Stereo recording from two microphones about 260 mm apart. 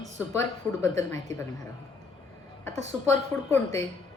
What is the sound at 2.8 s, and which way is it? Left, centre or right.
Speech, right.